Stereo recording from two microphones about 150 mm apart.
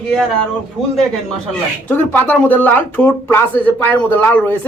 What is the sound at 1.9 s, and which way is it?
Speech, 10° left (ahead or behind).